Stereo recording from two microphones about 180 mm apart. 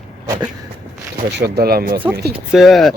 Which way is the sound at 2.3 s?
Centre (ahead or behind).